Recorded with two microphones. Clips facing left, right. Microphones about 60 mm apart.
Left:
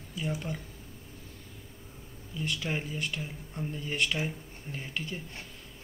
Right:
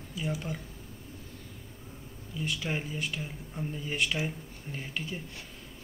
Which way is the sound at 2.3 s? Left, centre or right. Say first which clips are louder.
Even; centre.